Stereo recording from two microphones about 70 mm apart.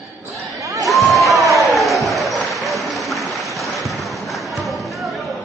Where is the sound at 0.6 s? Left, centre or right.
Right.